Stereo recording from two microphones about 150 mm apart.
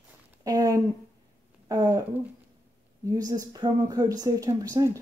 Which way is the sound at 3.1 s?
25° right (ahead or behind).